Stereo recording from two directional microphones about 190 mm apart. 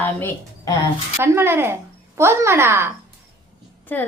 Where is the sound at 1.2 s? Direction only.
10° right (ahead or behind).